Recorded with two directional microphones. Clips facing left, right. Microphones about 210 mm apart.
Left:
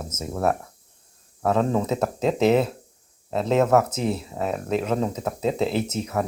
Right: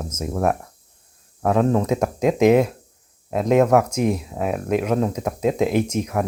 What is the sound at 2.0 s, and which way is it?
Speech, 10° right (ahead or behind).